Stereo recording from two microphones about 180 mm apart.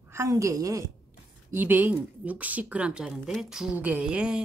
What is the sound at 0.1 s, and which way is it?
A woman's voice, 15° right (ahead or behind).